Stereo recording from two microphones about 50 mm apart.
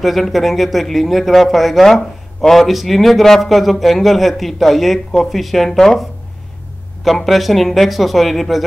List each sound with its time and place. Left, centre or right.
0.0 s speech: centre
7.1 s speech: centre